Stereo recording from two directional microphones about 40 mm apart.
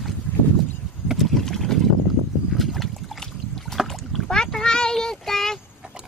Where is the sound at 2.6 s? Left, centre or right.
Centre.